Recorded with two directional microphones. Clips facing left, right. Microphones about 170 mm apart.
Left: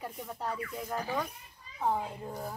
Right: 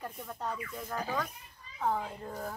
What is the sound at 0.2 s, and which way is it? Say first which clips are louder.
Speech: left 2 dB; 10° left (ahead or behind).